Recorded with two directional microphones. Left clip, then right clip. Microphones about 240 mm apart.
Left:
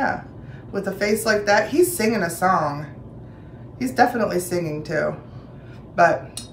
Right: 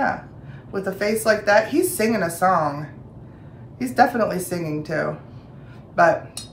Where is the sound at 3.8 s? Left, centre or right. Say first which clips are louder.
Right 1 dB; centre.